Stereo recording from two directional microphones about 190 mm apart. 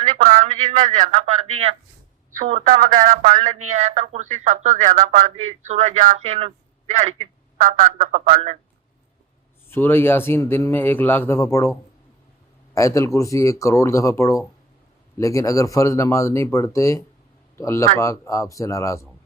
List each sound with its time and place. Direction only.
0.2 s speech: 40° right (ahead or behind)
3.0 s a man's voice: 40° right (ahead or behind)
9.6 s a man's voice: 10° left (ahead or behind)
12.7 s a man's voice: 15° left (ahead or behind)